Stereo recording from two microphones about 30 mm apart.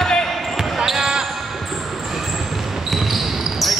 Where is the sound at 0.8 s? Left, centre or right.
Centre.